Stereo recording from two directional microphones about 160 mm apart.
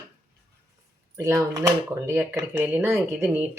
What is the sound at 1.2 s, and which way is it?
Speech, 20° right (ahead or behind).